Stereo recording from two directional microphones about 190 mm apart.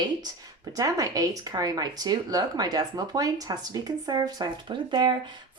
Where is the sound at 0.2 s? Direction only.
20° right (ahead or behind).